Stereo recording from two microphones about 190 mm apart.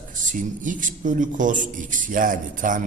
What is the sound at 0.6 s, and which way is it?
A man's voice, 45° right (ahead or behind).